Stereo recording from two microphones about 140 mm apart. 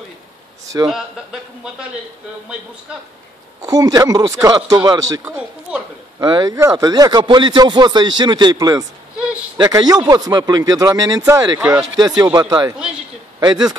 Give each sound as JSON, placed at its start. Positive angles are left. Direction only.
{"t": 0.8, "sound": "a man's voice", "side_deg": -5}
{"t": 3.6, "sound": "speech", "side_deg": -25}
{"t": 9.1, "sound": "a sound", "side_deg": -10}
{"t": 9.6, "sound": "speech", "side_deg": -30}
{"t": 12.7, "sound": "a man's voice", "side_deg": -5}
{"t": 13.4, "sound": "speech", "side_deg": -30}